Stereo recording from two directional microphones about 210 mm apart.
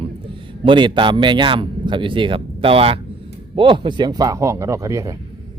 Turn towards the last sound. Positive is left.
turn(degrees=-15)  # may be behind; listen again after turning